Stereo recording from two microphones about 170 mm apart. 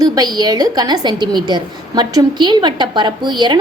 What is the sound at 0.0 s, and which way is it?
A woman's voice, 20° right (ahead or behind).